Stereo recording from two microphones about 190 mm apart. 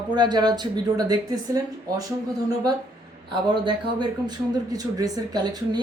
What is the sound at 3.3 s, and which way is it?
A man's voice, 25° right (ahead or behind).